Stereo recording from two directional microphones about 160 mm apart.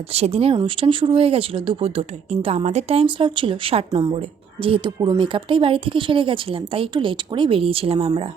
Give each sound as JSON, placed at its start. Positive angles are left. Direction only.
{"t": 0.1, "sound": "speech", "side_deg": -40}